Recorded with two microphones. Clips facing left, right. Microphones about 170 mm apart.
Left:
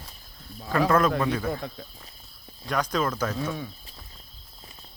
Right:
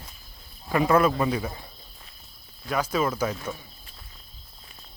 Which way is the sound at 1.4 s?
85° left.